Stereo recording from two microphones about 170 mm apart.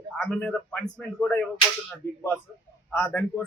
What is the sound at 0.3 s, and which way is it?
A man's voice, 10° left (ahead or behind).